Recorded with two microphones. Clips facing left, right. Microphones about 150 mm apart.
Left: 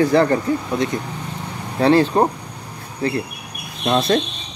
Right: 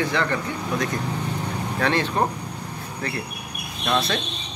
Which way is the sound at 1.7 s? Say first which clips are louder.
Left 9 dB; 30° left (ahead or behind).